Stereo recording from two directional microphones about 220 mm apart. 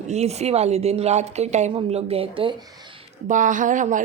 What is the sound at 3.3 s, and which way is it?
Speech, 35° right (ahead or behind).